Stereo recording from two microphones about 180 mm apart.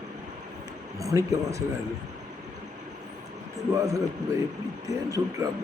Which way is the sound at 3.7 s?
20° right (ahead or behind).